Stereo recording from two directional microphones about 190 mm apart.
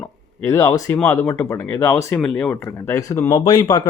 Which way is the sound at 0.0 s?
10° left (ahead or behind).